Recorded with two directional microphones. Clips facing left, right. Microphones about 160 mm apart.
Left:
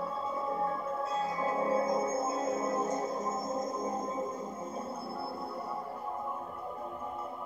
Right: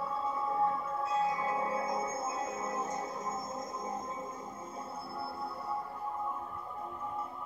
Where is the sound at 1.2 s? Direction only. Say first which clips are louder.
Left 2 dB; 30° left (ahead or behind).